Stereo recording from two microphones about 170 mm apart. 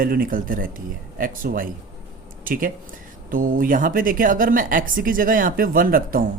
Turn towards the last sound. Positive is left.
turn(degrees=-55)  # may be behind; listen again after turning